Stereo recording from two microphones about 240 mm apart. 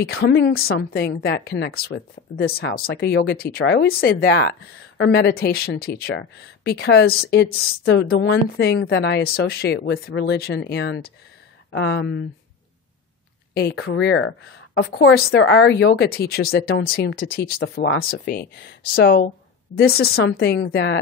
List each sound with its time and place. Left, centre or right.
0.0 s a woman's voice: left
13.6 s speech: left
18.2 s a woman's voice: left